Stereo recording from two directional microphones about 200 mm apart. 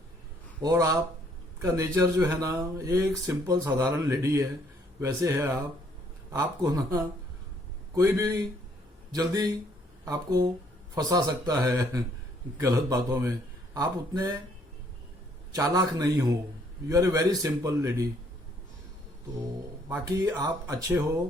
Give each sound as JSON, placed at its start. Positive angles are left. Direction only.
{"t": 0.6, "sound": "speech", "side_deg": -15}
{"t": 6.6, "sound": "speech", "side_deg": -20}
{"t": 15.5, "sound": "speech", "side_deg": -15}
{"t": 19.9, "sound": "speech", "side_deg": -15}